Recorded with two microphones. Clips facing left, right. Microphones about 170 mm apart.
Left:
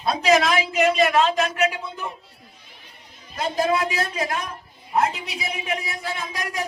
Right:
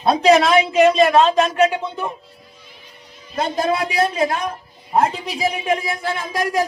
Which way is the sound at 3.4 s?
30° right (ahead or behind).